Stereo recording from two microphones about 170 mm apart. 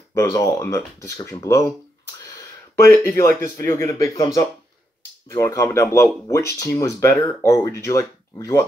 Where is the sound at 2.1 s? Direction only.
20° left (ahead or behind).